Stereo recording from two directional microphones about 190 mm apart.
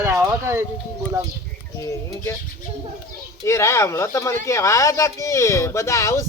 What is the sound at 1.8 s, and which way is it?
Speech, 15° left (ahead or behind).